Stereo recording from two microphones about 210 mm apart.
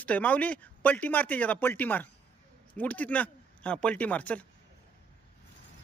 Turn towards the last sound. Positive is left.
turn(degrees=5)  # may be behind; listen again after turning